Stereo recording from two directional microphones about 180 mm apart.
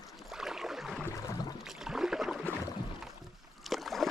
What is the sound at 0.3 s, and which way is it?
Boat, 5° right (ahead or behind).